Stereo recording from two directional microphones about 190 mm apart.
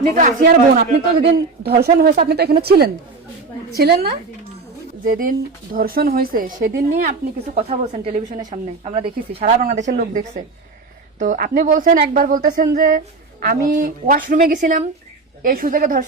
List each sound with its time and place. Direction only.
0.1 s a woman's voice: 40° right (ahead or behind)
1.2 s a man's voice: 65° right (ahead or behind)
1.7 s a man's voice: 55° right (ahead or behind)
5.0 s a woman's voice: 50° right (ahead or behind)
7.1 s a woman's voice: 35° right (ahead or behind)
9.4 s a woman's voice: 40° right (ahead or behind)